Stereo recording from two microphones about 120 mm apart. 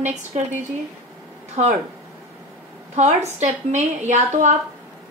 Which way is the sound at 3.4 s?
85° right.